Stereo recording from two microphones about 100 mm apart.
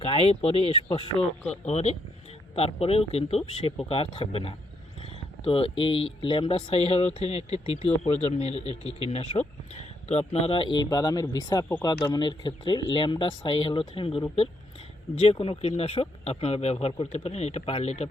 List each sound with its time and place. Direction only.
0.0 s speech: 75° left (ahead or behind); by 2.0 s 90° left
2.6 s speech: 75° left (ahead or behind)
9.7 s speech: 90° left; by 10.8 s 55° left (ahead or behind)
10.8 s speech: 40° left (ahead or behind); by 16.7 s 90° left
16.8 s speech: 80° left